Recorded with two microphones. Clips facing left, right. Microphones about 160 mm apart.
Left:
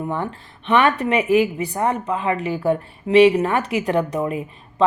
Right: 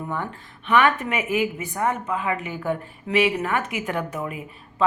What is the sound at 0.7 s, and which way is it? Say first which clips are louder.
Speech: left 3 dB; 30° left (ahead or behind).